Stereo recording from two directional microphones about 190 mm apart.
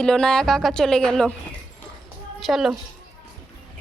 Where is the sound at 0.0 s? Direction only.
5° left (ahead or behind).